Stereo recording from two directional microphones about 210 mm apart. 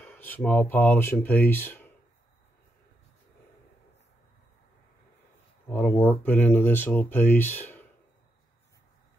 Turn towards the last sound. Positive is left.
turn(degrees=10)  # may be behind; listen again after turning